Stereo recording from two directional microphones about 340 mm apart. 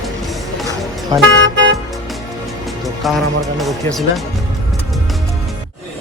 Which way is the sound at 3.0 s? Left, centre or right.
Centre.